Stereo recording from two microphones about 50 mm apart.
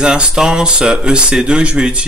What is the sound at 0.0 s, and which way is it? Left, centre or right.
Speech, centre.